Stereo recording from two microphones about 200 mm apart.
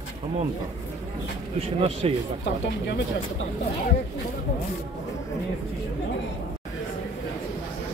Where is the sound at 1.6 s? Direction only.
30° right (ahead or behind).